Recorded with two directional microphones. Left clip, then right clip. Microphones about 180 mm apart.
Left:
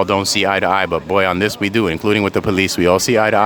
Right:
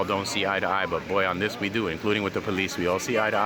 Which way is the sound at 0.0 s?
50° left (ahead or behind).